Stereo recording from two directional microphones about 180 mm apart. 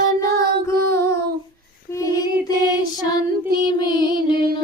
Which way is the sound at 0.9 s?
15° left (ahead or behind).